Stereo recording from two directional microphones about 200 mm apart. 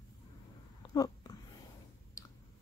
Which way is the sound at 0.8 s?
20° left (ahead or behind).